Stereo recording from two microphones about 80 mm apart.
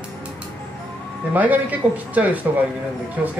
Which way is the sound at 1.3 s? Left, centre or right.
Right.